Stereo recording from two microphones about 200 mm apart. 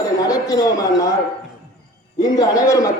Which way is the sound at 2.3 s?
15° left (ahead or behind).